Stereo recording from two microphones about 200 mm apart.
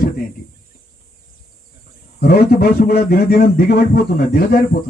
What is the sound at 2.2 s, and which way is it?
A man's voice, 50° left (ahead or behind).